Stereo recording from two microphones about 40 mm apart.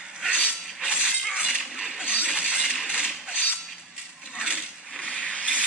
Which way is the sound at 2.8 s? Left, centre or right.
Centre.